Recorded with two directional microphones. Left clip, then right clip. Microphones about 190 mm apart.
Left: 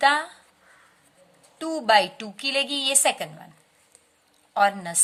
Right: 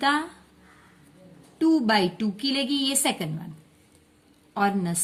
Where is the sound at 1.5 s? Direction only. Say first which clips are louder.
Left 2 dB; 30° left (ahead or behind).